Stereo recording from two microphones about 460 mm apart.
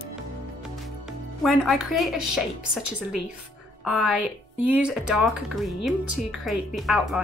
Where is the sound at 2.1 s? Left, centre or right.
Left.